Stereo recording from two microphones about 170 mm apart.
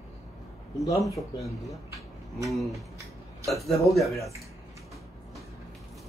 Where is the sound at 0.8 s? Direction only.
20° left (ahead or behind).